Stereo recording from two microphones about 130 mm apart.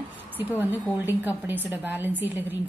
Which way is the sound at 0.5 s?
15° right (ahead or behind).